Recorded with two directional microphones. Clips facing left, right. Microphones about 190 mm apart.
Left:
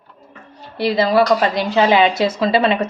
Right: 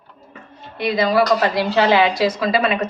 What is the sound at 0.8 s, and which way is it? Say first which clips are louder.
A woman's voice: left 2 dB; 30° left (ahead or behind).